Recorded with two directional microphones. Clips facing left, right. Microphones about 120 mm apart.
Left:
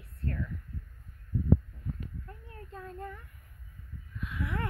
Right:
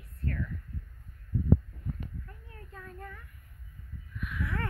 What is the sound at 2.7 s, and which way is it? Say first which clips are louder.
Speech: left 4 dB; 20° left (ahead or behind).